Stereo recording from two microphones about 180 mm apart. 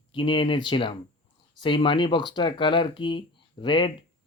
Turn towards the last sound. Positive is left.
turn(degrees=25)  # may be behind; listen again after turning